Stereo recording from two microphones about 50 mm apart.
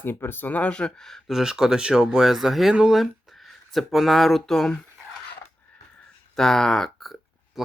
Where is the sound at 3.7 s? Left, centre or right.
Centre.